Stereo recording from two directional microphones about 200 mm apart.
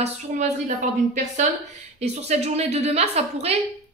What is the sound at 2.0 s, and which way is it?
A woman's voice, 35° right (ahead or behind).